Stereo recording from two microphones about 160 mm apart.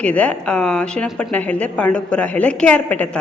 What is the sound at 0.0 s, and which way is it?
A woman's voice, 10° left (ahead or behind).